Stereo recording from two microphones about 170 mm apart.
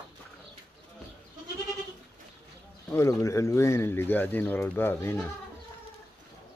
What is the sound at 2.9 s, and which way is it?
Speech, 15° left (ahead or behind).